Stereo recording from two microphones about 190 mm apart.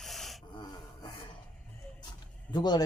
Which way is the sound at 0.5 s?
20° left (ahead or behind).